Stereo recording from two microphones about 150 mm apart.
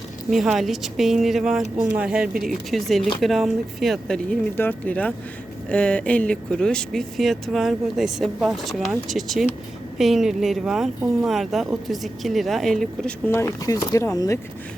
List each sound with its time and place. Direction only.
0.3 s speech: centre (ahead or behind)
13.2 s speech: 15° left (ahead or behind)